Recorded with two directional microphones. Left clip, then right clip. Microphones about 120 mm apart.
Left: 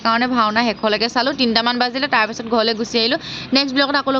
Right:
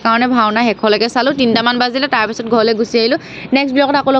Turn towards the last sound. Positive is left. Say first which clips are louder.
# right 5 dB
turn(degrees=-30)  # may be behind; listen again after turning